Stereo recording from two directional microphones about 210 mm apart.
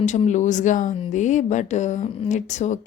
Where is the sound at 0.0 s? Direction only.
35° left (ahead or behind).